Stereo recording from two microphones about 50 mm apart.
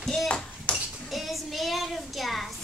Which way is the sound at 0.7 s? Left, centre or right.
Left.